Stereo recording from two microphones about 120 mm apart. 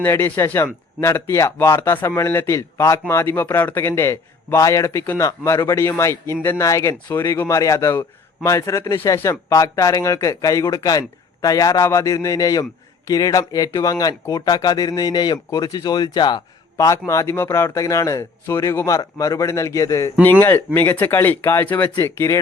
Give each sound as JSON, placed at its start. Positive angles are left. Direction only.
{"t": 0.0, "sound": "a man's voice", "side_deg": 20}
{"t": 16.7, "sound": "a man's voice", "side_deg": 25}